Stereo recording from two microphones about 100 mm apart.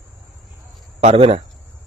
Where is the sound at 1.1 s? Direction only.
80° right.